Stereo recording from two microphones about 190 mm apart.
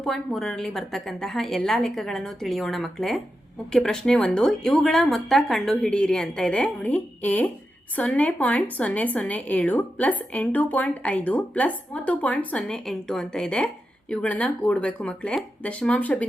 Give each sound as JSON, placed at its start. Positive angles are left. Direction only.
{"t": 0.0, "sound": "a woman's voice", "side_deg": 0}